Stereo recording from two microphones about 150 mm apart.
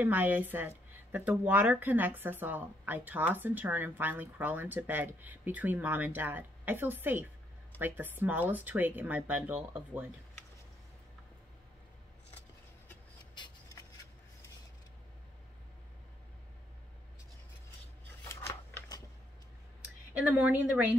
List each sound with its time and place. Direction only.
0.0 s a woman's voice: 10° right (ahead or behind)
13.3 s a sound: 30° left (ahead or behind)
18.3 s scissors: 15° left (ahead or behind)
20.2 s a woman's voice: 10° right (ahead or behind)